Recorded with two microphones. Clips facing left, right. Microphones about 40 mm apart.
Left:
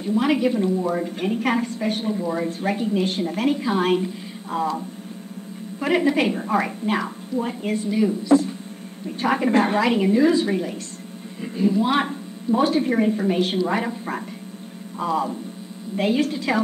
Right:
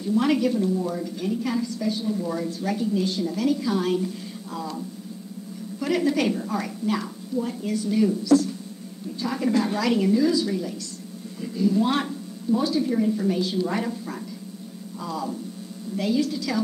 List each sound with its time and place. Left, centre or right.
0.2 s a woman's voice: left
2.1 s a woman's voice: left
5.8 s a woman's voice: left
7.9 s a woman's voice: left
9.4 s a woman's voice: left
9.8 s a woman's voice: left
11.4 s a sound: left
11.7 s a woman's voice: centre
12.0 s speech: left
13.6 s a woman's voice: left
15.0 s a woman's voice: left